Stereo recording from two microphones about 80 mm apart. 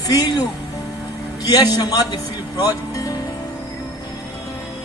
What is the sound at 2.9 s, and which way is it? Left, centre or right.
Music, left.